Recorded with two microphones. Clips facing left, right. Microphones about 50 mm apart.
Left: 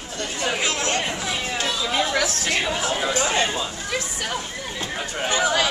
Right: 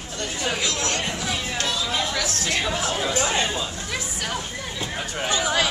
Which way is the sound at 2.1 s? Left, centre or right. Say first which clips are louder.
Left 3 dB; left.